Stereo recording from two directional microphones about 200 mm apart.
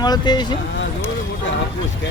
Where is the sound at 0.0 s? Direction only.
20° left (ahead or behind).